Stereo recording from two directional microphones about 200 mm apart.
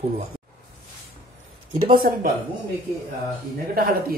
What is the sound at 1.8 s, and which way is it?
Speech, 45° right (ahead or behind).